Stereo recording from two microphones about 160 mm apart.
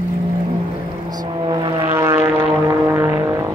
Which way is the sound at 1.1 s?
25° right (ahead or behind).